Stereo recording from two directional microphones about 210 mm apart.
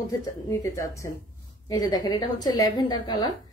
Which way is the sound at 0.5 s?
15° left (ahead or behind).